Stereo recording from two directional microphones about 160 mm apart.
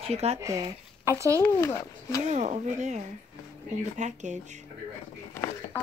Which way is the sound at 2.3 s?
45° right (ahead or behind).